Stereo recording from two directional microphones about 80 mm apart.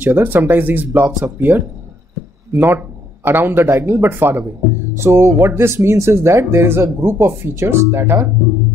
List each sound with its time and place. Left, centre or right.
0.0 s a man's voice: right